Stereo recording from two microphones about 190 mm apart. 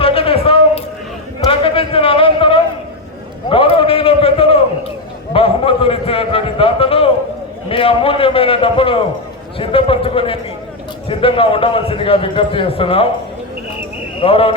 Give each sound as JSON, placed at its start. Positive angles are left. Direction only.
{"t": 0.0, "sound": "a sound", "side_deg": 30}
{"t": 7.7, "sound": "a man's voice", "side_deg": 30}
{"t": 14.2, "sound": "a man's voice", "side_deg": 30}